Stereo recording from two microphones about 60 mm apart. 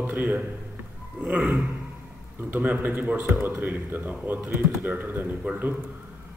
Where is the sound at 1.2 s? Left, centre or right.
Right.